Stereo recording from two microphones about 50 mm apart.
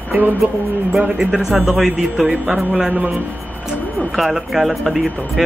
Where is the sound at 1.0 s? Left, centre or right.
Centre.